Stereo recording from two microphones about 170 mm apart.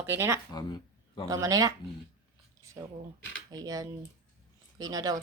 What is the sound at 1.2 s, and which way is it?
Speech, 20° right (ahead or behind).